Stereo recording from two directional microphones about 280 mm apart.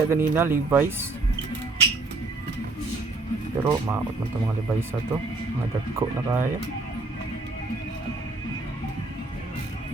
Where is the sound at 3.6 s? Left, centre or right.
Centre.